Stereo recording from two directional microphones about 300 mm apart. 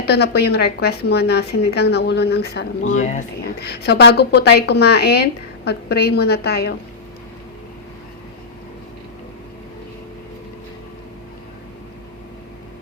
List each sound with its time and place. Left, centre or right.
0.0 s speech: left